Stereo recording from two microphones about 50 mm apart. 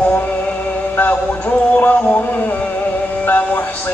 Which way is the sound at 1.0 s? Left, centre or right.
Left.